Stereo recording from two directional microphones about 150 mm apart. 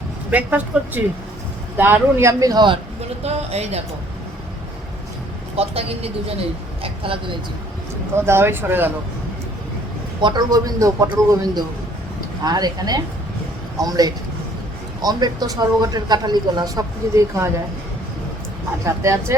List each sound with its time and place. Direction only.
0.3 s a man's voice: 10° right (ahead or behind); by 2.7 s 25° right (ahead or behind)
3.2 s speech: 45° right (ahead or behind)
5.5 s speech: 40° right (ahead or behind)
8.3 s speech: 15° right (ahead or behind)
10.2 s a man's voice: 30° right (ahead or behind)
18.9 s a man's voice: 20° right (ahead or behind)